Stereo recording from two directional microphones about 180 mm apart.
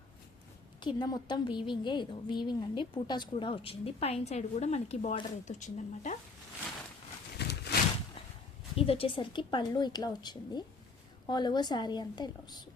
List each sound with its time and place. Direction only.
0.8 s a woman's voice: 25° left (ahead or behind); by 6.1 s 40° left (ahead or behind)
7.3 s a sound: 65° left (ahead or behind)
8.7 s speech: 30° left (ahead or behind)